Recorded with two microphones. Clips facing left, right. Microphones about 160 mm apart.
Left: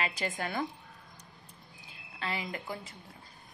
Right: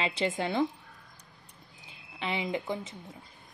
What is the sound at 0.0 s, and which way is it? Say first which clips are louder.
Speech: right 5 dB; 25° right (ahead or behind).